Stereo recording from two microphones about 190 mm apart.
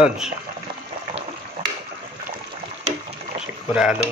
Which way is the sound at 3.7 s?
5° right (ahead or behind).